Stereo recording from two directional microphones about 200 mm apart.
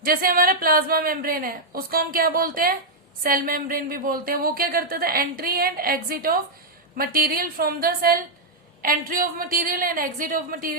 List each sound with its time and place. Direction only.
0.0 s speech: 45° right (ahead or behind)